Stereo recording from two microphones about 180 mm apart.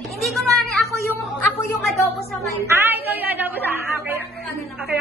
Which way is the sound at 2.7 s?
10° right (ahead or behind).